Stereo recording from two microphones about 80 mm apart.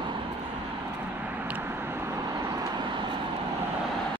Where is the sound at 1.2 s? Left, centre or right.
Right.